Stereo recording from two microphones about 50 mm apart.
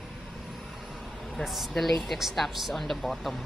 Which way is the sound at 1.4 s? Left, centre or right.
Centre.